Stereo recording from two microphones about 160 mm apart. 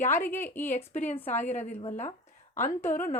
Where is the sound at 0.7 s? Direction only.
50° left (ahead or behind).